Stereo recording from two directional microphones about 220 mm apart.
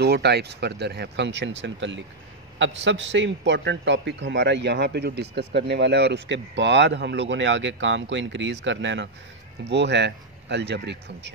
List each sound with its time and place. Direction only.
0.0 s a man's voice: 50° right (ahead or behind)